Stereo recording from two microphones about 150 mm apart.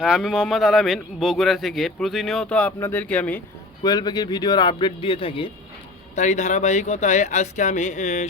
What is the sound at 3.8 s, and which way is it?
A man's voice, 25° left (ahead or behind).